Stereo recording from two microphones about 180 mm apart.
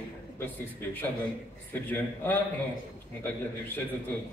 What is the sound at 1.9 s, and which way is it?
Speech, 10° left (ahead or behind).